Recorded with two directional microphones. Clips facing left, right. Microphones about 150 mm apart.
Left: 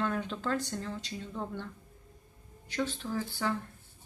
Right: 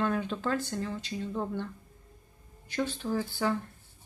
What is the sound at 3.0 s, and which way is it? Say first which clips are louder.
Speech: right 4 dB; 20° right (ahead or behind).